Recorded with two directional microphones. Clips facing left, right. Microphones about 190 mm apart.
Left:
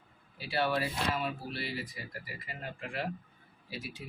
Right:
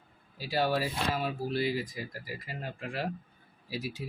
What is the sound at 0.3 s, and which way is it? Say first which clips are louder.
Speech: right 2 dB; 40° right (ahead or behind).